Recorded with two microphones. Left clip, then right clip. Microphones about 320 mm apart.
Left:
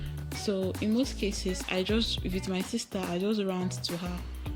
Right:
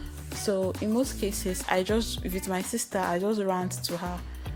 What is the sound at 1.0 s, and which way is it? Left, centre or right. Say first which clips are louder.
Speech: right 2 dB; right.